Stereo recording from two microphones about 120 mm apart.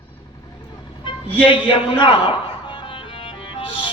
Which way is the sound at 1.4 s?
45° left (ahead or behind).